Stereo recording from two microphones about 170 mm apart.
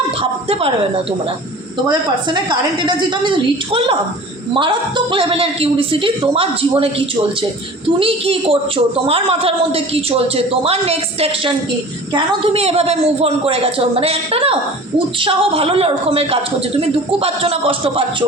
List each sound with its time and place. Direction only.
0.2 s a woman's voice: 35° right (ahead or behind)
1.9 s a woman's voice: 25° right (ahead or behind)
7.9 s a woman's voice: 35° right (ahead or behind)